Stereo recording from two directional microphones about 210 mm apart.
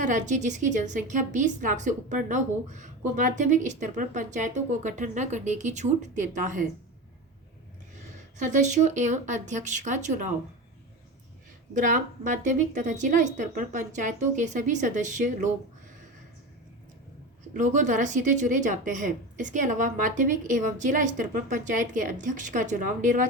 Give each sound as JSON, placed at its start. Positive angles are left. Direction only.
{"t": 0.0, "sound": "speech", "side_deg": -35}
{"t": 8.4, "sound": "speech", "side_deg": -35}
{"t": 11.7, "sound": "speech", "side_deg": -35}
{"t": 17.6, "sound": "speech", "side_deg": -35}